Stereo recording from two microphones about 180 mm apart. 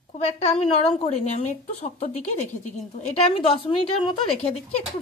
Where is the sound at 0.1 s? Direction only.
35° left (ahead or behind).